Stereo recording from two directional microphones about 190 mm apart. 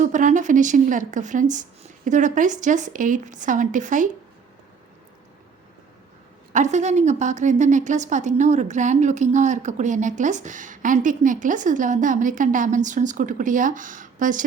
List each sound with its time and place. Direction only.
0.0 s a woman's voice: 40° right (ahead or behind)
6.5 s a woman's voice: 40° right (ahead or behind)